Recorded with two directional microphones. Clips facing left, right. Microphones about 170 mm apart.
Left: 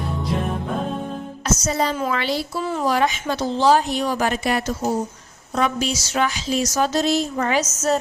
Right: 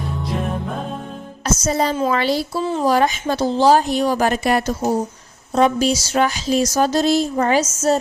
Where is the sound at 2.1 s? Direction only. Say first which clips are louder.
Right 4 dB; 40° right (ahead or behind).